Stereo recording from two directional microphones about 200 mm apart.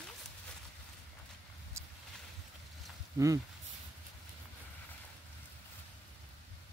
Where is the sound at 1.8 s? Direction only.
15° right (ahead or behind).